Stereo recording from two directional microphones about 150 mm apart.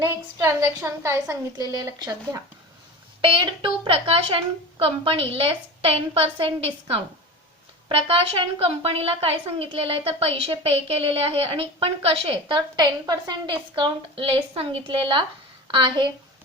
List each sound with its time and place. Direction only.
0.1 s a woman's voice: 20° right (ahead or behind)